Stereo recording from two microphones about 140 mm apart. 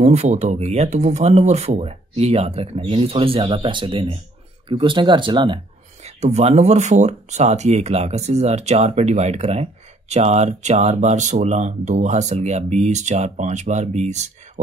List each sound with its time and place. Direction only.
0.0 s speech: 50° right (ahead or behind)
6.0 s speech: 50° right (ahead or behind)